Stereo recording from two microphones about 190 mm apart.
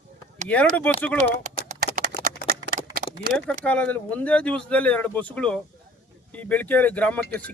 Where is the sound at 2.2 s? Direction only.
50° right (ahead or behind).